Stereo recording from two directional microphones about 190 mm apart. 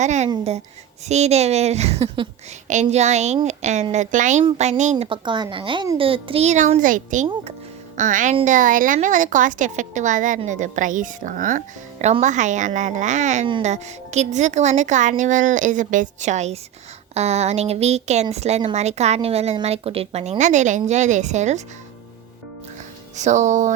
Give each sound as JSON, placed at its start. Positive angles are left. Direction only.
{"t": 0.0, "sound": "a woman's voice", "side_deg": -35}
{"t": 23.1, "sound": "a woman's voice", "side_deg": -40}